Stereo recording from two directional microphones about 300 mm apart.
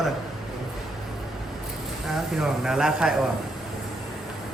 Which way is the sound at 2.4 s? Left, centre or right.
Centre.